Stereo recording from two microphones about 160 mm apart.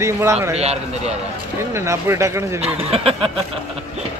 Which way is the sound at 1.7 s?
15° right (ahead or behind).